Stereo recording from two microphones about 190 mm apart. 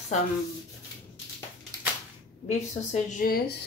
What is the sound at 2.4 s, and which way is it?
Speech, 40° left (ahead or behind).